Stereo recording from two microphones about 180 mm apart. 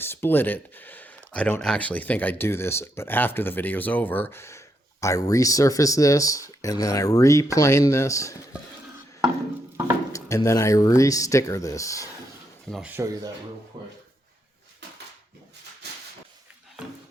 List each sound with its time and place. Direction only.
0.0 s speech: 10° left (ahead or behind)
10.1 s speech: 20° left (ahead or behind)
12.7 s speech: 10° right (ahead or behind)